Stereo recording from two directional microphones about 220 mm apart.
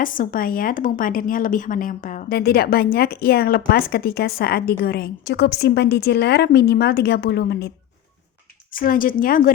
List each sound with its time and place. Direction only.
0.0 s a woman's voice: 40° left (ahead or behind)
8.7 s speech: 40° left (ahead or behind)